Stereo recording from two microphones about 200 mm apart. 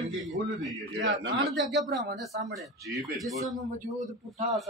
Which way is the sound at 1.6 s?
Centre (ahead or behind).